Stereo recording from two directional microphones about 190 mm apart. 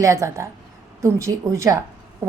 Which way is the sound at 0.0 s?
15° right (ahead or behind).